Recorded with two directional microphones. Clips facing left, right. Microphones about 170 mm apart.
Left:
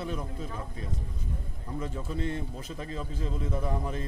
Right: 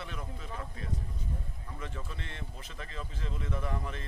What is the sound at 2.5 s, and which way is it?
A man's voice, 35° left (ahead or behind).